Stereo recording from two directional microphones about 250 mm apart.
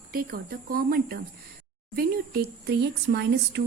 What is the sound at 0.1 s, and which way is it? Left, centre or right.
Speech, right.